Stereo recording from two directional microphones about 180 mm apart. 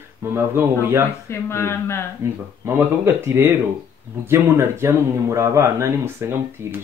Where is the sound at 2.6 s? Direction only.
15° right (ahead or behind).